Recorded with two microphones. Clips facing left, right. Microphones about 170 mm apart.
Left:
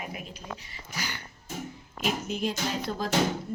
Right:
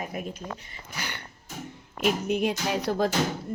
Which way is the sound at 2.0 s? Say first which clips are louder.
Right 5 dB; 60° right (ahead or behind).